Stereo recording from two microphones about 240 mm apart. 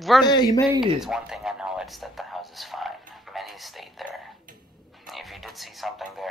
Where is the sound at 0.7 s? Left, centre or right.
Centre.